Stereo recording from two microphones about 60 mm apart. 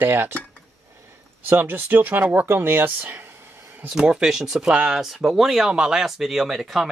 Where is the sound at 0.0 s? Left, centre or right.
Right.